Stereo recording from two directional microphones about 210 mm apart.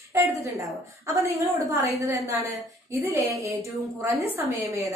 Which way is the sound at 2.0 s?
15° right (ahead or behind).